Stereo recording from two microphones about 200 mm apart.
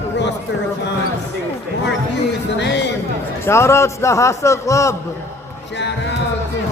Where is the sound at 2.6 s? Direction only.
60° left (ahead or behind).